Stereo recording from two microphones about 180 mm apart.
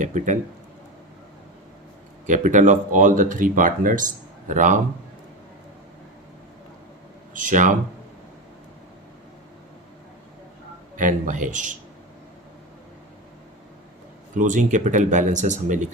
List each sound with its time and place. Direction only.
0.0 s speech: 45° right (ahead or behind)
2.2 s speech: 45° right (ahead or behind)
7.3 s speech: 45° right (ahead or behind)
10.9 s speech: 45° right (ahead or behind)
14.3 s speech: 45° right (ahead or behind)